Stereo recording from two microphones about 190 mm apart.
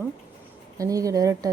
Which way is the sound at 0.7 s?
15° right (ahead or behind).